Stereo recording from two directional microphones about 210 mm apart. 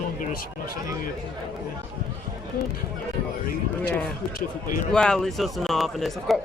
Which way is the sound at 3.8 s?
10° left (ahead or behind).